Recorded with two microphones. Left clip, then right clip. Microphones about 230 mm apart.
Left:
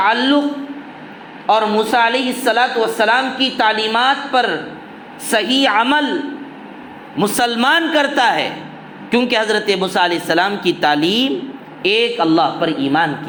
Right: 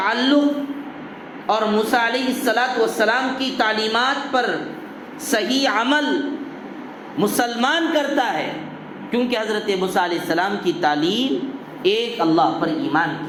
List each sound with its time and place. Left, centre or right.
0.0 s a man's voice: left
1.5 s a woman's voice: left
7.2 s a man's voice: left